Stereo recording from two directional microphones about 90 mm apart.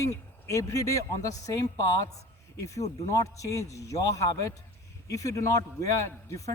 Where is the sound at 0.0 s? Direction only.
35° left (ahead or behind).